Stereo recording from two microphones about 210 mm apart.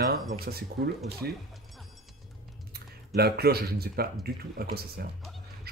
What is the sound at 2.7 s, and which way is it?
Speech, 50° right (ahead or behind).